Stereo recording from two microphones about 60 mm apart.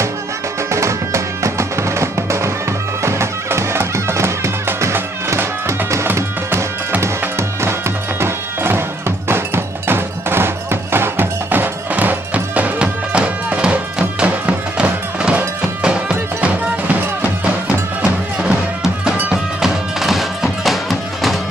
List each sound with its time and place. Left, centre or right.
0.7 s music: right
12.7 s music: centre
19.6 s music: centre